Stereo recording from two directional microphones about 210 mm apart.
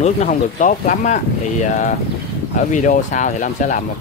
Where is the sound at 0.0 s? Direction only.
35° left (ahead or behind).